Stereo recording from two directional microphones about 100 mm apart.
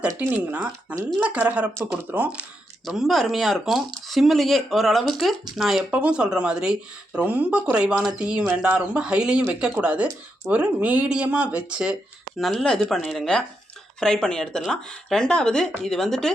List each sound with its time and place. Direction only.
0.2 s speech: 15° right (ahead or behind)
2.8 s speech: centre (ahead or behind)
5.9 s speech: 15° right (ahead or behind)
12.4 s speech: centre (ahead or behind)